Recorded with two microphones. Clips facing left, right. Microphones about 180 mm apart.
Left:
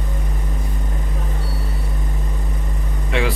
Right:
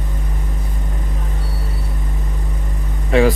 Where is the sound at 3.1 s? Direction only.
40° right (ahead or behind).